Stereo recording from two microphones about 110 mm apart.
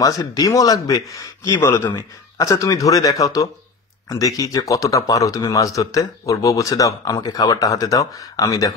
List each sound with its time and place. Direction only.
0.0 s speech: 35° left (ahead or behind)